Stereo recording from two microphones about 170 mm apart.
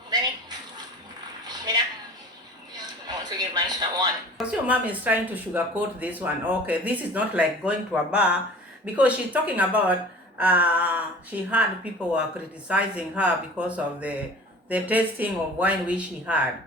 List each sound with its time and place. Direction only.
1.5 s a sound: 25° right (ahead or behind)
4.4 s speech: 10° right (ahead or behind)
12.6 s speech: 10° right (ahead or behind)